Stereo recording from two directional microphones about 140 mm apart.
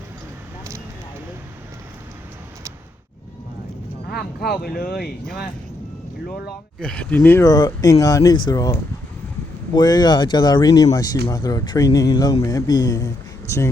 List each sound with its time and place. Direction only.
4.1 s speech: 90° left
6.7 s speech: 5° left (ahead or behind)
7.4 s speech: 25° left (ahead or behind)